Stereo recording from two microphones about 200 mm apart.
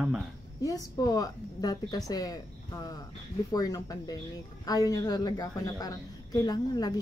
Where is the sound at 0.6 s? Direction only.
20° left (ahead or behind).